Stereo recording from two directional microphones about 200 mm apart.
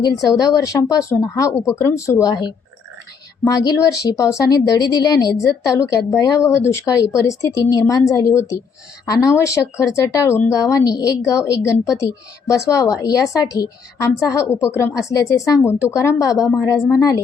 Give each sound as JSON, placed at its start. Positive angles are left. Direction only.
{"t": 0.3, "sound": "a woman's voice", "side_deg": 15}